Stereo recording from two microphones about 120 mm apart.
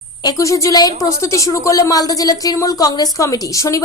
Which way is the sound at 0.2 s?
30° left (ahead or behind).